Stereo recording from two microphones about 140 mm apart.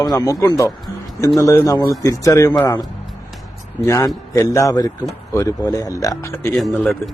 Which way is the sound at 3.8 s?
20° left (ahead or behind).